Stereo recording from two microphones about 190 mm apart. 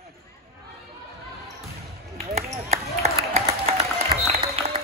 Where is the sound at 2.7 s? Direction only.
35° right (ahead or behind).